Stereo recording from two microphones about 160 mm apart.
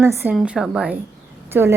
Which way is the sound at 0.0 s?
15° right (ahead or behind).